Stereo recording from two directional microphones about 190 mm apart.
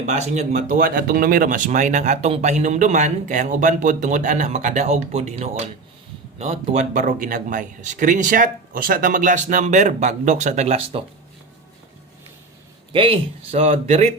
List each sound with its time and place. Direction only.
0.0 s speech: 35° right (ahead or behind)
12.9 s speech: 30° right (ahead or behind)